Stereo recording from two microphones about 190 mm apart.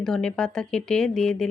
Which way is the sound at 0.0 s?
5° left (ahead or behind).